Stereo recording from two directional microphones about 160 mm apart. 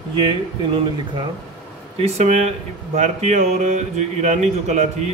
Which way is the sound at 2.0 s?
45° right (ahead or behind).